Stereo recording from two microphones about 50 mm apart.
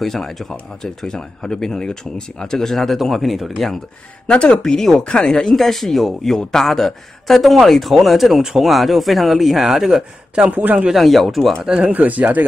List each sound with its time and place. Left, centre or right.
0.0 s speech: centre
4.3 s speech: centre
10.5 s speech: right
10.9 s speech: centre
11.8 s speech: right